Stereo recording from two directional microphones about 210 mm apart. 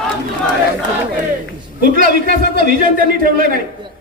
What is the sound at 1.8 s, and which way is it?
A man's voice, 40° right (ahead or behind).